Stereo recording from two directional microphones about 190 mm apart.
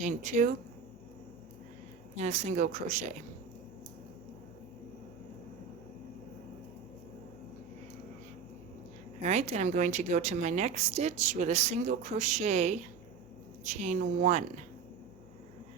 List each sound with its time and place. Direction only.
0.0 s speech: 40° right (ahead or behind)
2.1 s speech: 35° right (ahead or behind)
9.2 s speech: 35° right (ahead or behind)